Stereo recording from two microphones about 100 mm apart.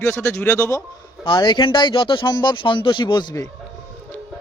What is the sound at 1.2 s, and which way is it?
Speech, 50° left (ahead or behind).